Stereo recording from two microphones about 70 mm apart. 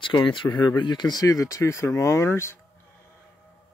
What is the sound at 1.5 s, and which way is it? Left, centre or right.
Speech, left.